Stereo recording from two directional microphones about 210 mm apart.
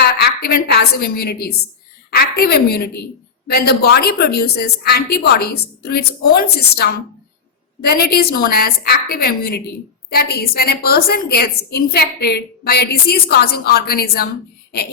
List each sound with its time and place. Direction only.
0.0 s a woman's voice: 50° left (ahead or behind)